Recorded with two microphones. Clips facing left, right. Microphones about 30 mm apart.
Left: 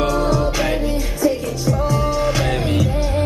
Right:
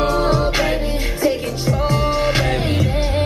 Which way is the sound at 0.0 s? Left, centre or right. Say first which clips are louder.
Right 1 dB; right.